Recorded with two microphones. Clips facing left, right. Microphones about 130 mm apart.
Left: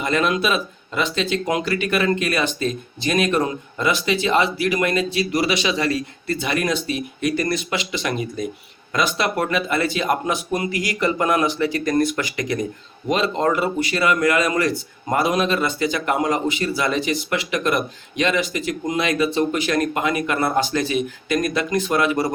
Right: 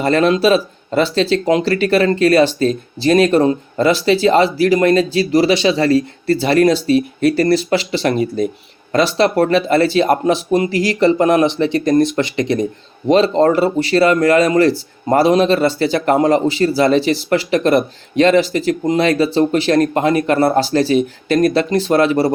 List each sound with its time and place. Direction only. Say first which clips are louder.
0.0 s speech: right 7 dB; 35° right (ahead or behind)